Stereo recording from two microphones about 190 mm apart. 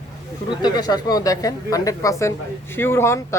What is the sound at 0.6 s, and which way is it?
Speech, 20° left (ahead or behind).